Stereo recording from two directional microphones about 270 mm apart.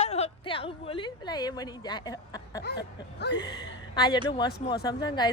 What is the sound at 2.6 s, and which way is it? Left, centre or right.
Speech, left.